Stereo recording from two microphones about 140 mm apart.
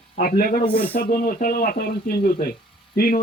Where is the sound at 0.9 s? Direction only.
75° left (ahead or behind).